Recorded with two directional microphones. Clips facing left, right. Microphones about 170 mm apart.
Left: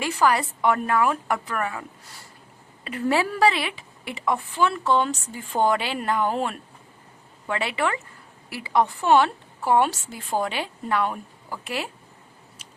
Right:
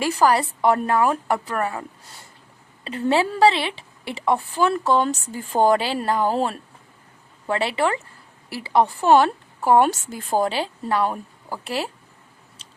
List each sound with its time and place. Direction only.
0.0 s a woman's voice: 35° right (ahead or behind)
2.8 s a woman's voice: 30° right (ahead or behind)
12.6 s chewing: 30° right (ahead or behind)